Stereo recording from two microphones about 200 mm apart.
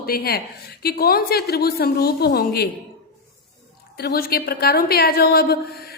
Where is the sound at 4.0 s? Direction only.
50° left (ahead or behind).